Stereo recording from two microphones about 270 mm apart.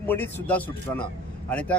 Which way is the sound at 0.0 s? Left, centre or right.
Centre.